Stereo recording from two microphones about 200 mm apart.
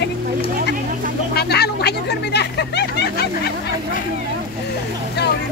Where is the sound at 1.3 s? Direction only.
55° left (ahead or behind).